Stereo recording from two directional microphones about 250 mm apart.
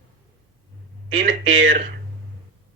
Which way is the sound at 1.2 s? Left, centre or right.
Right.